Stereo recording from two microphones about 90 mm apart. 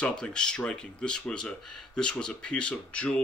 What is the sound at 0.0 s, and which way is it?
Speech, 10° left (ahead or behind).